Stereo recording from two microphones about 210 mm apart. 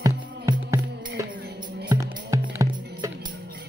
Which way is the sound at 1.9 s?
20° right (ahead or behind).